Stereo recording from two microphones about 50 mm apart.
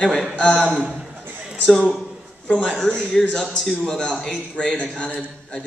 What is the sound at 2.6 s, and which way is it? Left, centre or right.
Speech, centre.